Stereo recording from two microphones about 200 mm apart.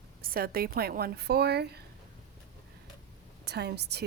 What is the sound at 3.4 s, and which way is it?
Speech, 55° right (ahead or behind).